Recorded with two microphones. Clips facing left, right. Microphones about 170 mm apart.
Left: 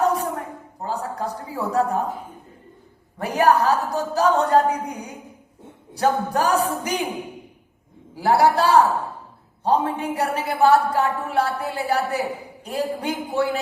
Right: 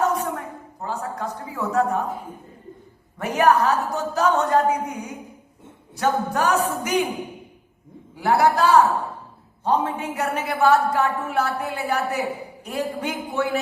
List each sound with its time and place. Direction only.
0.0 s a sound: 35° left (ahead or behind)
0.9 s a woman's voice: 35° left (ahead or behind)
3.2 s a woman's voice: 35° left (ahead or behind)
8.1 s a woman's voice: 35° left (ahead or behind)